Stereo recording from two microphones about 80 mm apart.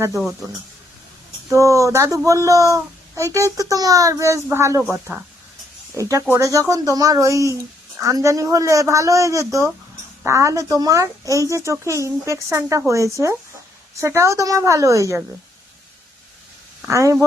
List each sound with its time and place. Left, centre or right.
1.5 s speech: right
6.0 s speech: right
16.9 s speech: right